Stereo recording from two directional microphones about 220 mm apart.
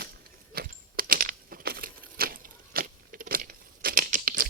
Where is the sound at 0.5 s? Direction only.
40° right (ahead or behind).